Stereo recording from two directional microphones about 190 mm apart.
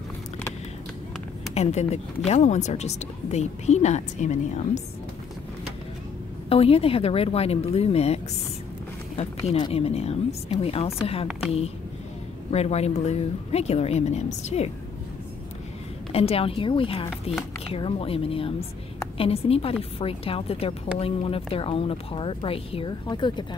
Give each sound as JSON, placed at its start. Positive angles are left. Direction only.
{"t": 1.5, "sound": "speech", "side_deg": 35}
{"t": 6.5, "sound": "speech", "side_deg": 30}
{"t": 9.6, "sound": "speech", "side_deg": 30}
{"t": 12.4, "sound": "speech", "side_deg": 35}
{"t": 16.1, "sound": "a woman's voice", "side_deg": 30}